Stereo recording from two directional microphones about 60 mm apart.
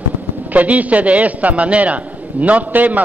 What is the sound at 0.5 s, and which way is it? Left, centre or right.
A man's voice, right.